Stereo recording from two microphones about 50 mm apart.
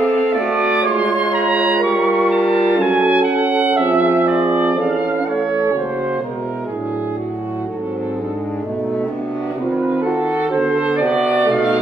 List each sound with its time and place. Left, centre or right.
0.5 s music: right
2.0 s music: left
2.8 s music: right
9.9 s music: right